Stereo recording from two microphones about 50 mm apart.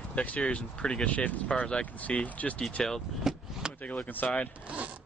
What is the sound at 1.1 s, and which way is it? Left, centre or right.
Speech, left.